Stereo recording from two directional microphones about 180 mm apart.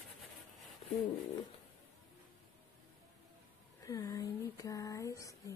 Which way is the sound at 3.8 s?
20° left (ahead or behind).